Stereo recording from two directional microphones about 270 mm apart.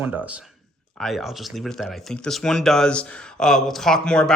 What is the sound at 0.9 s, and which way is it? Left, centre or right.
Speech, centre.